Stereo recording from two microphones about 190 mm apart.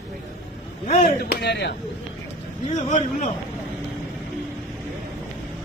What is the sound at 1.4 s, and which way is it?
Speech, 60° left (ahead or behind).